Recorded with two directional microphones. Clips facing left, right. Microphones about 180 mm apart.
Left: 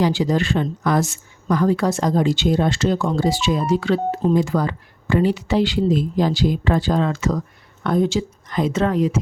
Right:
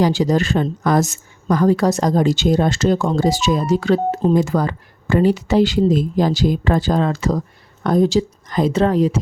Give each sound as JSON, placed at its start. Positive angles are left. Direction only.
{"t": 0.0, "sound": "a woman's voice", "side_deg": -40}